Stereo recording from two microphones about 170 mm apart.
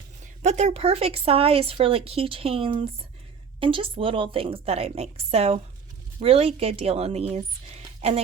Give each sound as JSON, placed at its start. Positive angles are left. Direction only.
{"t": 0.4, "sound": "speech", "side_deg": -40}